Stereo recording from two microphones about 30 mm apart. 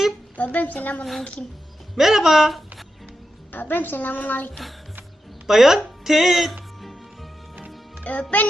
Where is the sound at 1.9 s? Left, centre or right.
Centre.